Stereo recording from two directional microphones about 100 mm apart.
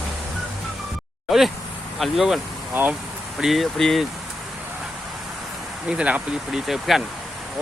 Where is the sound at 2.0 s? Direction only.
5° right (ahead or behind).